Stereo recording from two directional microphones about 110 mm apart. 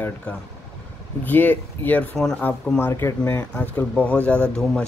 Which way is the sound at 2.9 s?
20° left (ahead or behind).